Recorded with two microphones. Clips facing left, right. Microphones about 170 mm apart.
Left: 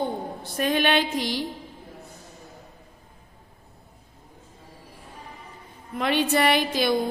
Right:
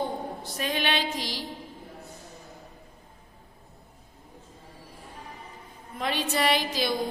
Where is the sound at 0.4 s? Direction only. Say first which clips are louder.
Left 7 dB; 50° left (ahead or behind).